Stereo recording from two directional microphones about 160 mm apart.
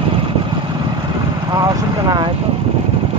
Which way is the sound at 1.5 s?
25° right (ahead or behind).